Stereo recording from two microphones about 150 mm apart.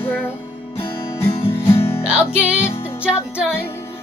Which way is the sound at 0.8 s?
15° left (ahead or behind).